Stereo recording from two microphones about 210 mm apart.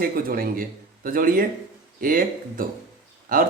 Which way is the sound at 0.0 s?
45° right (ahead or behind).